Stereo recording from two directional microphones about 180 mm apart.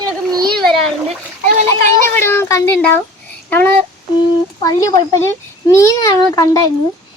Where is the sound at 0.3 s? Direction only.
20° right (ahead or behind).